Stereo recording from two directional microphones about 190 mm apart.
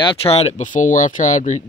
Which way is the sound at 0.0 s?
30° left (ahead or behind).